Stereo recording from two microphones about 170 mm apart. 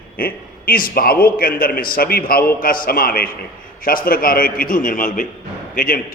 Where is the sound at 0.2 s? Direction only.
60° left (ahead or behind).